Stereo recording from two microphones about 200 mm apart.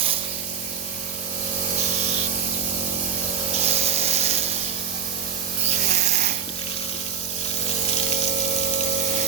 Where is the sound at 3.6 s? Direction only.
30° right (ahead or behind).